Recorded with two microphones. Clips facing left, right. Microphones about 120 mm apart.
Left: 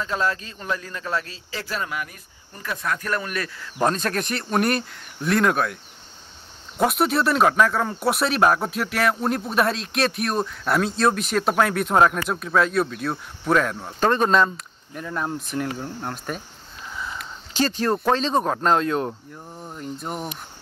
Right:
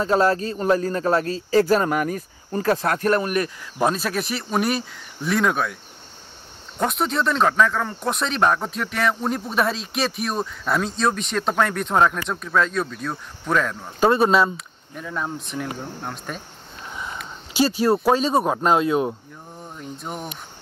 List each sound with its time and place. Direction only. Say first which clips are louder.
0.0 s a man's voice: right 7 dB; 40° right (ahead or behind)
3.0 s speech: right 7 dB; 25° right (ahead or behind)
3.8 s speech: even; 5° right (ahead or behind)
6.8 s speech: left 2 dB; 5° left (ahead or behind)
13.9 s speech: right 2 dB; 10° right (ahead or behind)
16.9 s a sound: even; 20° right (ahead or behind)
17.6 s speech: right 3 dB; 10° right (ahead or behind)